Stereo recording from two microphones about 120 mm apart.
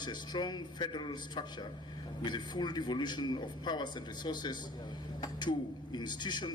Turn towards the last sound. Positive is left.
turn(degrees=40)  # may be behind; listen again after turning